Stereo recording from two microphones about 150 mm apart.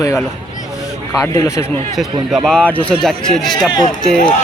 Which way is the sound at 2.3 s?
Centre (ahead or behind).